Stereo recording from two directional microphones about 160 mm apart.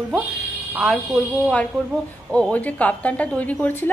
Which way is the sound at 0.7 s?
Centre (ahead or behind).